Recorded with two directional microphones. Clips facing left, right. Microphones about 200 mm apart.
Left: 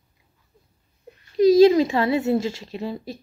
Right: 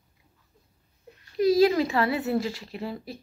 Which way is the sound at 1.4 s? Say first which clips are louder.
Left 7 dB; 20° left (ahead or behind).